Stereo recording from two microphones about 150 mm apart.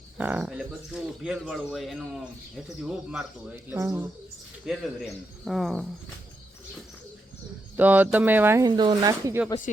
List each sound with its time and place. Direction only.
0.2 s speech: 10° right (ahead or behind)
3.7 s speech: 15° right (ahead or behind)
4.6 s speech: centre (ahead or behind)
7.8 s speech: 10° right (ahead or behind)